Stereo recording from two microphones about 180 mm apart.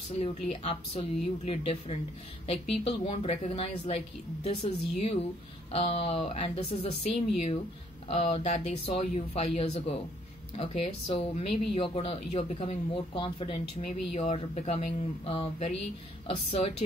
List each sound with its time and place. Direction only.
0.2 s speech: 35° left (ahead or behind)
5.7 s speech: 35° left (ahead or behind)